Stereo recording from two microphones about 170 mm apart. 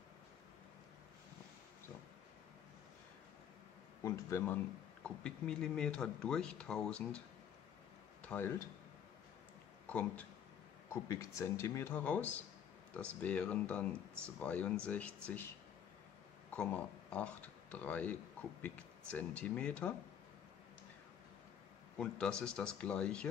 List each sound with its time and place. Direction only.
4.0 s speech: 15° left (ahead or behind)
5.0 s speech: 5° left (ahead or behind)
9.8 s speech: 10° left (ahead or behind)
10.9 s speech: 20° left (ahead or behind)
16.4 s speech: 10° left (ahead or behind)
21.9 s speech: 5° left (ahead or behind)